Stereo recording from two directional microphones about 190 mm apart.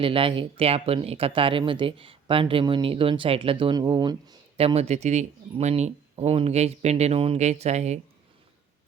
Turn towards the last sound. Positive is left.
turn(degrees=-35)  # may be behind; listen again after turning